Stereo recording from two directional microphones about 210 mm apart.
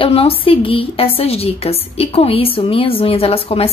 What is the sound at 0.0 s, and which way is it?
A woman's voice, 25° left (ahead or behind).